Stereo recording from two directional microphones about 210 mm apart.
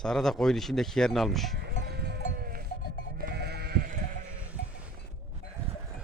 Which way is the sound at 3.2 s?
50° right (ahead or behind).